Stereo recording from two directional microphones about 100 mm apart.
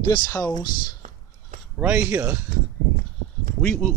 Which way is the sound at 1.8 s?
15° right (ahead or behind).